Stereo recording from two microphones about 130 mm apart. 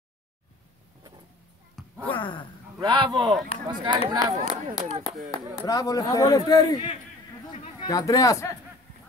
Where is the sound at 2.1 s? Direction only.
40° left (ahead or behind).